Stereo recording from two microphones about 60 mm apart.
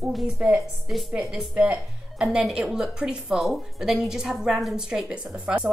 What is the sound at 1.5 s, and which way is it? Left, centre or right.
Speech, right.